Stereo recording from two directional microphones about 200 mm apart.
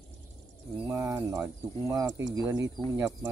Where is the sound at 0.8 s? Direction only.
15° right (ahead or behind).